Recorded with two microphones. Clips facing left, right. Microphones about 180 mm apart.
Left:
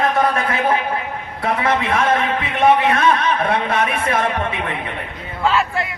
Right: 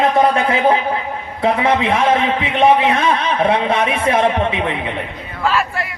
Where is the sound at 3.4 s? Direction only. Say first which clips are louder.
Right 3 dB; 25° right (ahead or behind).